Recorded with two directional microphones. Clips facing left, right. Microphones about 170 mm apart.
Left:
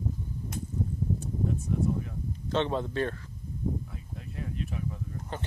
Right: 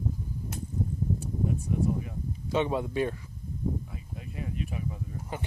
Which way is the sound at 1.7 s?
5° right (ahead or behind).